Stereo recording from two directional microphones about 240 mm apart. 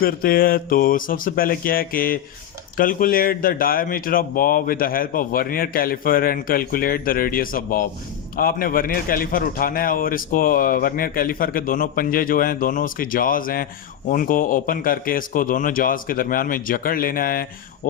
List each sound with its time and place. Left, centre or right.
0.0 s a man's voice: left